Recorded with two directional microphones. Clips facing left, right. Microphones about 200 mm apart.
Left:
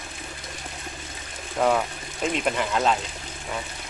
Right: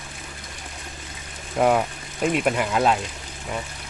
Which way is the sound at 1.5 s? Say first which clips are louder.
Right 3 dB; 10° right (ahead or behind).